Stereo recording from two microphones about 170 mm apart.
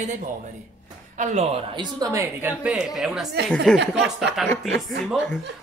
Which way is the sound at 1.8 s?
20° right (ahead or behind).